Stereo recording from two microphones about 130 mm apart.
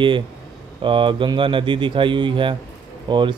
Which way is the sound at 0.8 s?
40° right (ahead or behind).